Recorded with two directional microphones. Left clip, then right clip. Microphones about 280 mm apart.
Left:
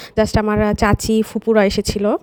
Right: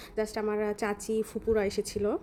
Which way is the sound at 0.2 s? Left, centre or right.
Left.